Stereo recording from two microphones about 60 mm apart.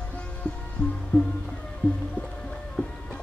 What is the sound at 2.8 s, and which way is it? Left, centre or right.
Music, left.